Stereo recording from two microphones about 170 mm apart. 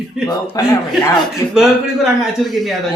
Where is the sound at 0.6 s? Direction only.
20° left (ahead or behind).